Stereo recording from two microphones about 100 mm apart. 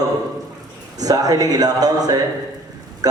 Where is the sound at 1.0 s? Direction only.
40° right (ahead or behind).